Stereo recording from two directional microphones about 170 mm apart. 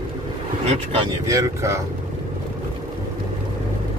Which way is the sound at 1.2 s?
15° right (ahead or behind).